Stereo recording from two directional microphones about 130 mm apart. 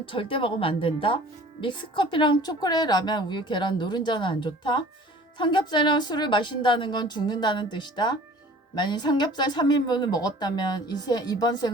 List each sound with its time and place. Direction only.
0.0 s a woman's voice: 40° left (ahead or behind)